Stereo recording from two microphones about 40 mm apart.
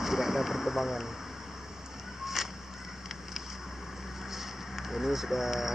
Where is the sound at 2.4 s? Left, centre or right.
Centre.